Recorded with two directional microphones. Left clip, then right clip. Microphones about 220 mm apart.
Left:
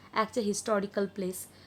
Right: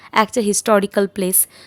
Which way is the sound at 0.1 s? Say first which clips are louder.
Right 13 dB; 35° right (ahead or behind).